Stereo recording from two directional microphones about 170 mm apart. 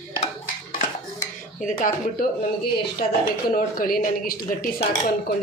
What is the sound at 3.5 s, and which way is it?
Speech, 55° left (ahead or behind).